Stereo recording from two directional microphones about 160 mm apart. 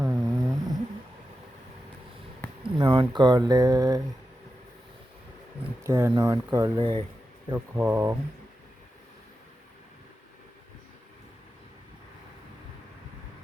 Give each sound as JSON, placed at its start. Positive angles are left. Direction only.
{"t": 0.0, "sound": "a sound", "side_deg": -15}
{"t": 2.6, "sound": "speech", "side_deg": -30}
{"t": 5.8, "sound": "speech", "side_deg": -15}
{"t": 7.5, "sound": "speech", "side_deg": -10}